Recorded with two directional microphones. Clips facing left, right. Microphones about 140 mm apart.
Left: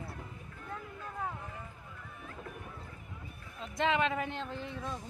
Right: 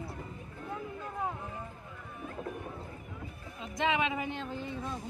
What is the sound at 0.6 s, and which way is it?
Boat, 20° right (ahead or behind).